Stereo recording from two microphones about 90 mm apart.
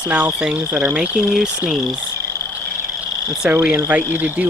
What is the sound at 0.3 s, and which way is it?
Speech, 10° right (ahead or behind).